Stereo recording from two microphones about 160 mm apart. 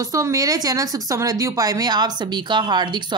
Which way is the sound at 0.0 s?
20° right (ahead or behind).